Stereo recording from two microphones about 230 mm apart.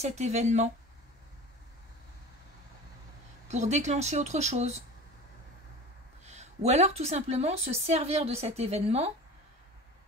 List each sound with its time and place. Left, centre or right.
0.0 s speech: right
3.4 s speech: right
6.2 s speech: right